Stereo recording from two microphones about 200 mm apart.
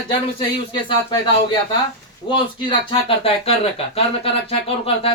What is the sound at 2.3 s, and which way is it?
Speech, 25° left (ahead or behind).